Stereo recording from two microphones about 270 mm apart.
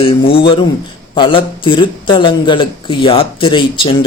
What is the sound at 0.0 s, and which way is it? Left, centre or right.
A man's voice, centre.